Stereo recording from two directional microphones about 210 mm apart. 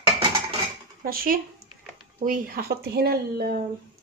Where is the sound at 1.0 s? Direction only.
45° right (ahead or behind).